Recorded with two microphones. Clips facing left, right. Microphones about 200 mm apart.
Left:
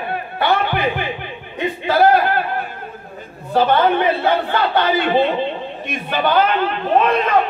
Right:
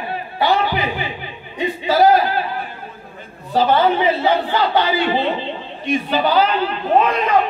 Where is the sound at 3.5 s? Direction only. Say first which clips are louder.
Even; 60° left (ahead or behind).